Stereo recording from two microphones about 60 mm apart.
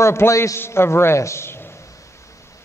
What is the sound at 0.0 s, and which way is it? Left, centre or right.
A man's voice, left.